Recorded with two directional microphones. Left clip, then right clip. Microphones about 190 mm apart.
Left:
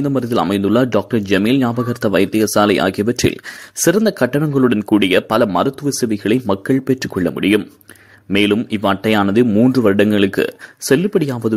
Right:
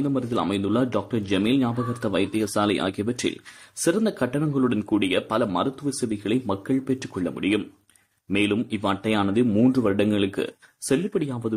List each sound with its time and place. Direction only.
0.0 s speech: 30° left (ahead or behind)